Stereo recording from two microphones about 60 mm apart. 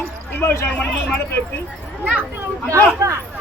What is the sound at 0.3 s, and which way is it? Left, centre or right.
Speech, left.